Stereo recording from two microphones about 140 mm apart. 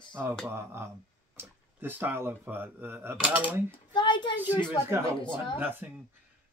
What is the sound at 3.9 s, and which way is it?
Speech, 35° left (ahead or behind).